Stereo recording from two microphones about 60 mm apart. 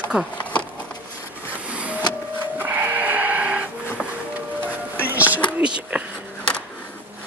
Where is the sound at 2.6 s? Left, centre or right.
Right.